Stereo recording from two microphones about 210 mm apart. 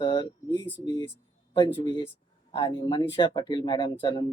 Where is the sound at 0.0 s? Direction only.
20° left (ahead or behind).